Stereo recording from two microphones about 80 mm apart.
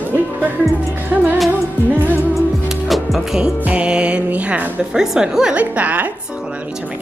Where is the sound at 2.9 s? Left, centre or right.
Centre.